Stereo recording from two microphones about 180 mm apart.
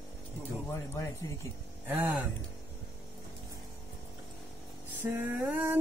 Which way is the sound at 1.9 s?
10° right (ahead or behind).